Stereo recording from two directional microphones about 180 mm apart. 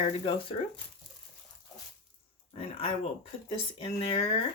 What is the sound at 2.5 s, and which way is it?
Speech, 35° left (ahead or behind).